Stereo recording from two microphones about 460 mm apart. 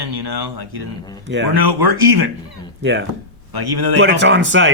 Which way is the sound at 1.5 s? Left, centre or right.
Right.